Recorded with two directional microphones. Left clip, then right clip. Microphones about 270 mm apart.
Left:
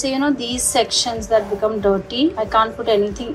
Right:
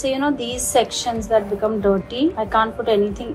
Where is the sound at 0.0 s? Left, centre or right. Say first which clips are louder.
Left 1 dB; centre.